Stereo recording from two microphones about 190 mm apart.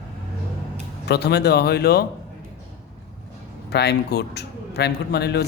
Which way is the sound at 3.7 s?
60° left (ahead or behind).